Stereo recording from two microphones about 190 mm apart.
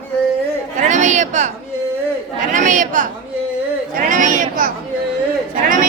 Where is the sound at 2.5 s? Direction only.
40° right (ahead or behind).